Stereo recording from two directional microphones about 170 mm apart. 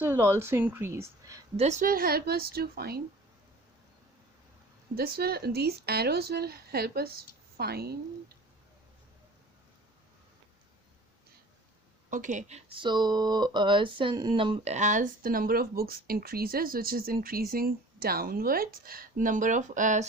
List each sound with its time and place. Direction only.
0.0 s speech: 15° right (ahead or behind)
1.5 s a woman's voice: 40° right (ahead or behind); by 3.0 s 65° right (ahead or behind)
4.9 s speech: 65° right (ahead or behind)
12.1 s speech: 50° right (ahead or behind)